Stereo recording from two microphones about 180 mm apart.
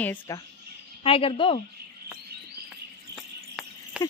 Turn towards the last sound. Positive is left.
turn(degrees=0)  # may be behind; listen again after turning